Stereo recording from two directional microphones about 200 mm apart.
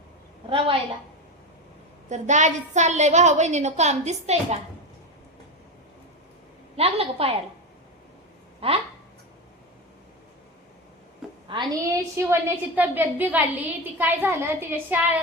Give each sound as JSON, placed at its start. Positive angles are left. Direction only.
{"t": 2.0, "sound": "a woman's voice", "side_deg": -35}
{"t": 6.7, "sound": "a woman's voice", "side_deg": -30}
{"t": 8.6, "sound": "a woman's voice", "side_deg": -30}
{"t": 11.4, "sound": "a woman's voice", "side_deg": -20}